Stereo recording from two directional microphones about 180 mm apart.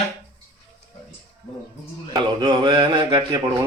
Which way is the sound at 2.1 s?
25° right (ahead or behind).